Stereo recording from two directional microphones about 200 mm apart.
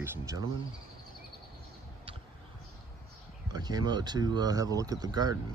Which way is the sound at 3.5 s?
20° right (ahead or behind).